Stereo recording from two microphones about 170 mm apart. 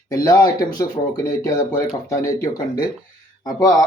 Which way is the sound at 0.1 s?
20° left (ahead or behind).